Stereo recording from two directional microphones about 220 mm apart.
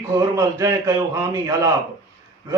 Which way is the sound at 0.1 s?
15° right (ahead or behind).